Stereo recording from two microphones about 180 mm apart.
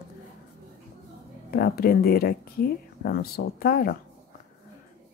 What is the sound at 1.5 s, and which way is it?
Speech, 55° left (ahead or behind).